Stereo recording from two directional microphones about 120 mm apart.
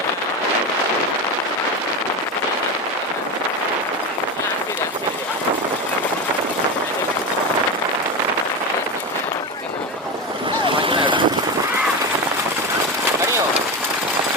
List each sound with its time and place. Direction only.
10.7 s vehicle: 45° right (ahead or behind)